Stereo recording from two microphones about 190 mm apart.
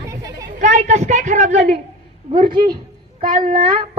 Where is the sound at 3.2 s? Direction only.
45° right (ahead or behind).